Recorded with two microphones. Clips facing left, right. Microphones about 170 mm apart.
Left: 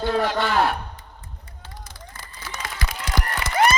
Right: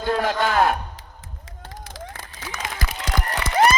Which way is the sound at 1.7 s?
90° right.